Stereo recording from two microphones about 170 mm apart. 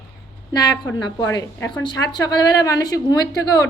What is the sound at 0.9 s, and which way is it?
A woman's voice, 20° left (ahead or behind).